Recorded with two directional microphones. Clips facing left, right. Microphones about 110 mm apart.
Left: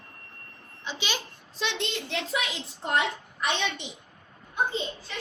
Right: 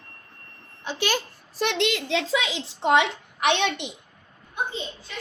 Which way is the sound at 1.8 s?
90° right.